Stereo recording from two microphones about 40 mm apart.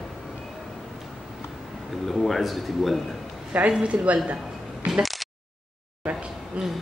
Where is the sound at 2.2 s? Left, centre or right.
Centre.